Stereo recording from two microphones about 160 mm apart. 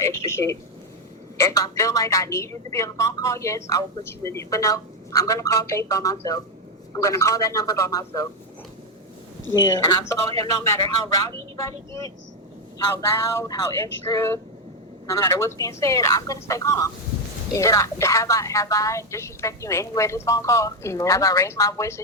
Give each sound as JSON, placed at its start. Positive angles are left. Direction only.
{"t": 0.0, "sound": "speech", "side_deg": 15}
{"t": 9.5, "sound": "speech", "side_deg": 20}
{"t": 13.1, "sound": "speech", "side_deg": 20}